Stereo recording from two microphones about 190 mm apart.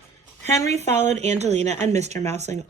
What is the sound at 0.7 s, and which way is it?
Speech, 35° right (ahead or behind).